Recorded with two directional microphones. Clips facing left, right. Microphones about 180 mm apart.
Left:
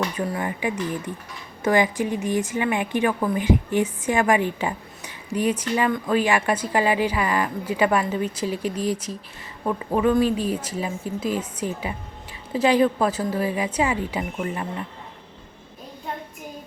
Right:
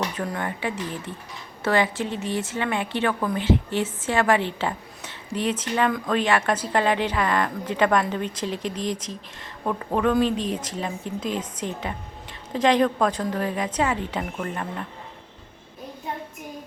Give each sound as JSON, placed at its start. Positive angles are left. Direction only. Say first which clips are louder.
{"t": 0.2, "sound": "a woman's voice", "louder": "left 2 dB", "side_deg": 10}